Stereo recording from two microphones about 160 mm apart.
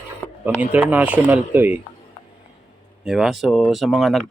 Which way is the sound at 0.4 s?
10° right (ahead or behind).